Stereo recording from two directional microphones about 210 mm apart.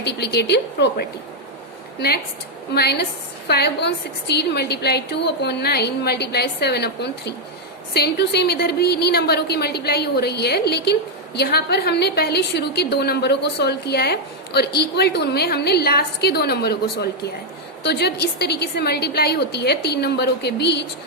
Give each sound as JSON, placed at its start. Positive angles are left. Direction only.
{"t": 0.0, "sound": "a woman's voice", "side_deg": 50}